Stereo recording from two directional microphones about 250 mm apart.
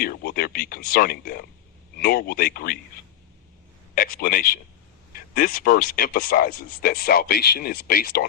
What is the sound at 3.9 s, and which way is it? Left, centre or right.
A man's voice, left.